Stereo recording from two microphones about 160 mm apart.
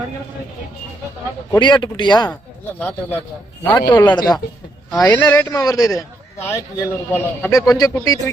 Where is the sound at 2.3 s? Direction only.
10° left (ahead or behind).